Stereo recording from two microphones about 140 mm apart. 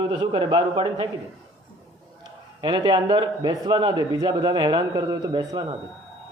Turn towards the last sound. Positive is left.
turn(degrees=-35)  # may be behind; listen again after turning